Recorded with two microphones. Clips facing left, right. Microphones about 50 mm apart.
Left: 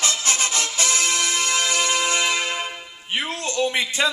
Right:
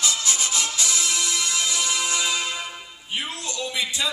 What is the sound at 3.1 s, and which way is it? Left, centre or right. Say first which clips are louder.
Music: left 5 dB; left.